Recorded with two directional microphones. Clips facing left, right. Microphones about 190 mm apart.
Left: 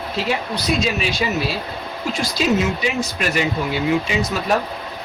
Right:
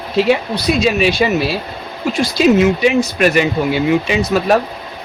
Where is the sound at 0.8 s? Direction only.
65° right (ahead or behind).